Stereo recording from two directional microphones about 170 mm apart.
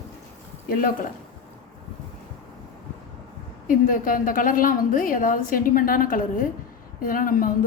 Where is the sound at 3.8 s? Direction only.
55° left (ahead or behind).